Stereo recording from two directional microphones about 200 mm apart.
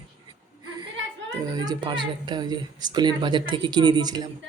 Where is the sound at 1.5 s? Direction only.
20° right (ahead or behind).